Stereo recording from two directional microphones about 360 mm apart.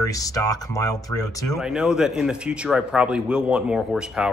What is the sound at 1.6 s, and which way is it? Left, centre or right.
A man's voice, centre.